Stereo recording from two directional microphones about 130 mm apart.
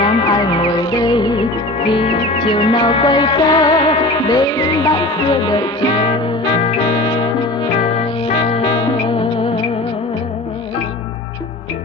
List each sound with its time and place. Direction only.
0.0 s music: 35° left (ahead or behind)
8.5 s music: 45° left (ahead or behind)